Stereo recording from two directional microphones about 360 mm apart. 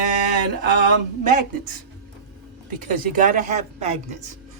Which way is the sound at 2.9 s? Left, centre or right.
Right.